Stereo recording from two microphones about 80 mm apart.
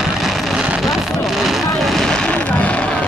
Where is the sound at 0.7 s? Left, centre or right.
Centre.